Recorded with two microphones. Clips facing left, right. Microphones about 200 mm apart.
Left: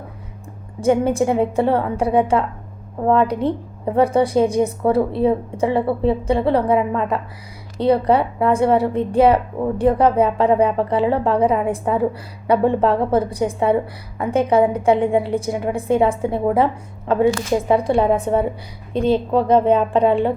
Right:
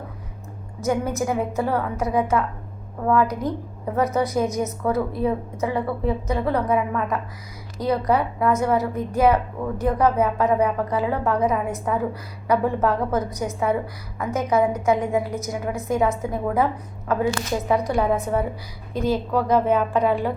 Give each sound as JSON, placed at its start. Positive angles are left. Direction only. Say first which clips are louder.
{"t": 0.8, "sound": "a woman's voice", "louder": "left 7 dB", "side_deg": 30}